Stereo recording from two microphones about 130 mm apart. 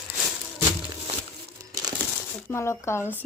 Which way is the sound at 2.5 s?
20° left (ahead or behind).